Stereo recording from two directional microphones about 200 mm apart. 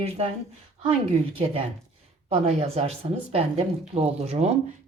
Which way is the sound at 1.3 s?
30° right (ahead or behind).